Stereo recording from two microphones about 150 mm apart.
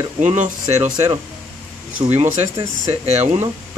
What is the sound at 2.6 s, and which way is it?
Speech, 40° right (ahead or behind).